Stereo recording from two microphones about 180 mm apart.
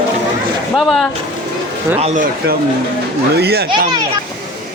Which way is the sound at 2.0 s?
40° right (ahead or behind).